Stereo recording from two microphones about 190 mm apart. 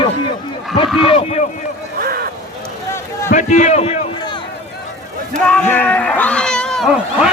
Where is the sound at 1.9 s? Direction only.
50° right (ahead or behind).